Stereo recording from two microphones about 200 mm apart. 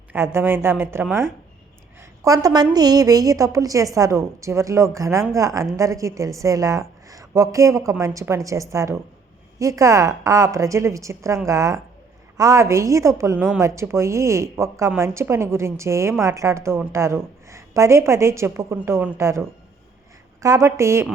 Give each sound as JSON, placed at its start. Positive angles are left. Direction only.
{"t": 0.1, "sound": "a woman's voice", "side_deg": -10}